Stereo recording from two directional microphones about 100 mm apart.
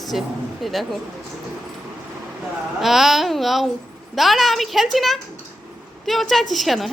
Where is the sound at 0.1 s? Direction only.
Centre (ahead or behind).